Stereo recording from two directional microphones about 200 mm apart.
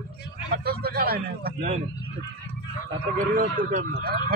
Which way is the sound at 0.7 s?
50° right (ahead or behind).